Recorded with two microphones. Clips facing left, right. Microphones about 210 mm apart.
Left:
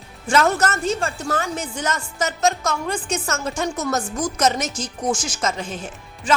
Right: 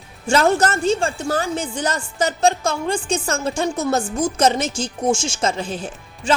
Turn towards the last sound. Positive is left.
turn(degrees=-30)  # may be behind; listen again after turning